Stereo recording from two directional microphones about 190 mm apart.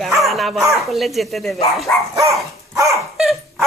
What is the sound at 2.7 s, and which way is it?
Dog, 15° right (ahead or behind).